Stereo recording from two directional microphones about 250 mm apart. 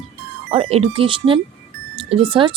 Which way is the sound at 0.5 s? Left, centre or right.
Right.